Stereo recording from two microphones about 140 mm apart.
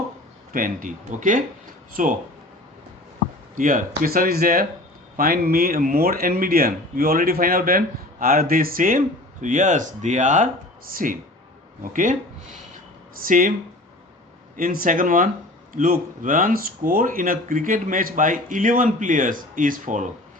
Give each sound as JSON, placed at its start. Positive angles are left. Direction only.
{"t": 0.5, "sound": "speech", "side_deg": -75}
{"t": 3.6, "sound": "speech", "side_deg": -75}
{"t": 10.9, "sound": "speech", "side_deg": -75}
{"t": 13.2, "sound": "speech", "side_deg": -75}
{"t": 14.5, "sound": "speech", "side_deg": -85}
{"t": 15.7, "sound": "speech", "side_deg": -85}